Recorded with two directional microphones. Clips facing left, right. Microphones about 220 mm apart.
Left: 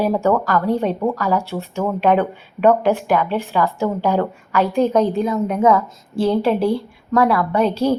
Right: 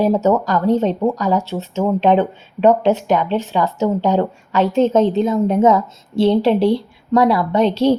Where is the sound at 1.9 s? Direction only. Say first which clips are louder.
Right 1 dB; 25° right (ahead or behind).